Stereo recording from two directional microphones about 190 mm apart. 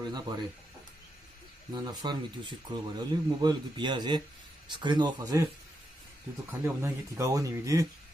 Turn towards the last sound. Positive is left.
turn(degrees=-15)  # may be behind; listen again after turning